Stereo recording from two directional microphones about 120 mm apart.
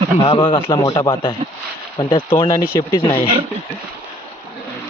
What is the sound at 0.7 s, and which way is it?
Speech, 25° left (ahead or behind).